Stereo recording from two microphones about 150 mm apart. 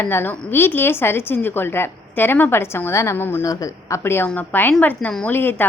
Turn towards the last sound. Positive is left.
turn(degrees=15)  # may be behind; listen again after turning